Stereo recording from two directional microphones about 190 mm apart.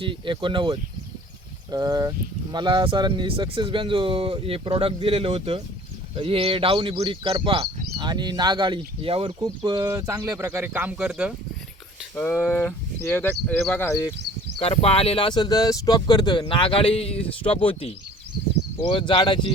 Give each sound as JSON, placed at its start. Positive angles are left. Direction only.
{"t": 0.0, "sound": "speech", "side_deg": -25}
{"t": 12.1, "sound": "speech", "side_deg": 10}
{"t": 14.6, "sound": "speech", "side_deg": 30}